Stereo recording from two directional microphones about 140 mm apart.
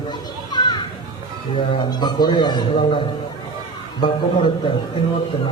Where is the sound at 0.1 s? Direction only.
30° left (ahead or behind).